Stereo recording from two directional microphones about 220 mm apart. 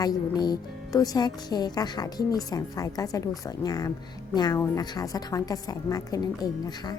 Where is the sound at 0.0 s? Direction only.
20° left (ahead or behind).